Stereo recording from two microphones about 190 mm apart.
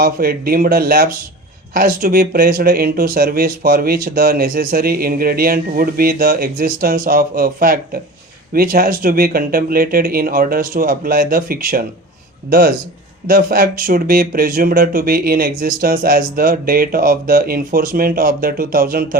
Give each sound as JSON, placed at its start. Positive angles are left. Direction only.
{"t": 0.0, "sound": "speech", "side_deg": -50}